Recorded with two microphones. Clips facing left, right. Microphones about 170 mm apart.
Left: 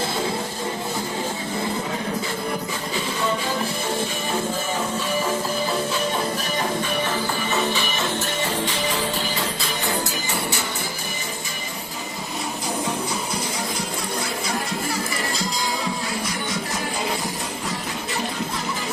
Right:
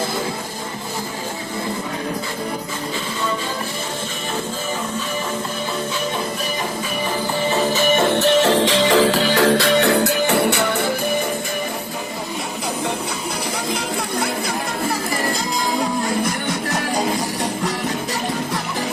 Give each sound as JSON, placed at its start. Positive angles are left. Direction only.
{"t": 7.5, "sound": "music", "side_deg": -45}
{"t": 16.5, "sound": "music", "side_deg": -70}